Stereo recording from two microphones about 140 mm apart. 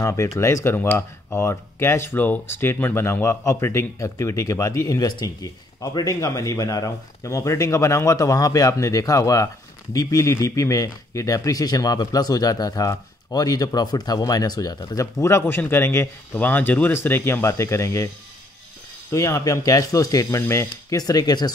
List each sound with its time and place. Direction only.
0.0 s speech: 20° left (ahead or behind)
19.1 s speech: 25° left (ahead or behind)